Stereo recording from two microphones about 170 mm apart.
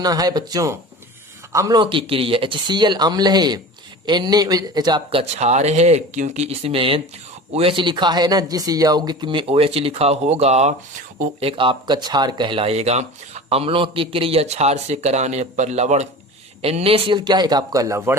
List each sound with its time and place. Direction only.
0.0 s speech: 20° right (ahead or behind)
5.2 s speech: 40° right (ahead or behind); by 18.2 s 15° right (ahead or behind)